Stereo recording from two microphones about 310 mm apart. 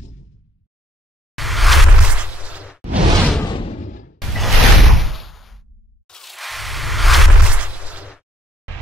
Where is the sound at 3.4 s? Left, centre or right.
Centre.